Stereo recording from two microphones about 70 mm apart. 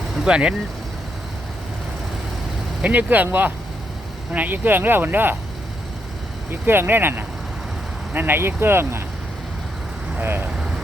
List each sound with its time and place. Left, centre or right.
0.3 s speech: centre
2.8 s speech: right
4.3 s speech: right
6.5 s speech: right
10.2 s speech: right